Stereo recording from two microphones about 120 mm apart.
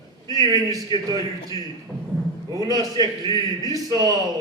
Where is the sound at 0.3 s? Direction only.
30° right (ahead or behind).